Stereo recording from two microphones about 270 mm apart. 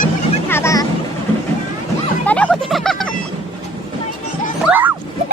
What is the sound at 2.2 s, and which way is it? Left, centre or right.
Music, centre.